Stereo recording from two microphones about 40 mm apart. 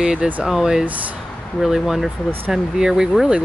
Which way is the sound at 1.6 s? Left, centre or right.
Centre.